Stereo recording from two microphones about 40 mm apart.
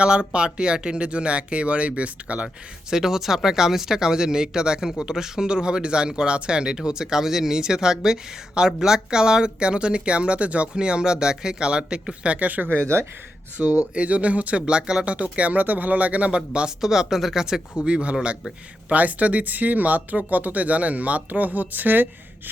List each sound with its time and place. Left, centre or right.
0.0 s speech: right
2.9 s speech: centre; by 12.6 s right
12.6 s speech: left
13.6 s speech: right
14.6 s speech: right
16.5 s speech: right
16.8 s speech: centre
17.8 s speech: right
18.9 s speech: right